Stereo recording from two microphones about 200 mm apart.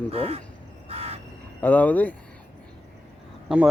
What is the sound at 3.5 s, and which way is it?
Speech, 5° right (ahead or behind).